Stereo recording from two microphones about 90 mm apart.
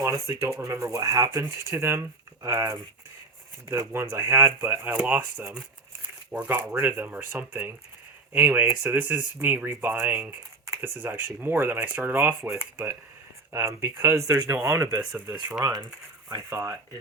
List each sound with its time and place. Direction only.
0.0 s speech: 30° right (ahead or behind)
6.3 s speech: 20° right (ahead or behind)
16.3 s speech: 40° right (ahead or behind)